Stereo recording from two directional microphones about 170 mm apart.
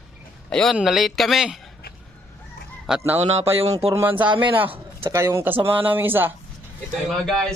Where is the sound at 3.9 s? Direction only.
10° right (ahead or behind).